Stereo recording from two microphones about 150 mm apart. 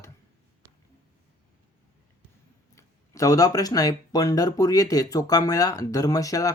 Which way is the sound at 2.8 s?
20° left (ahead or behind).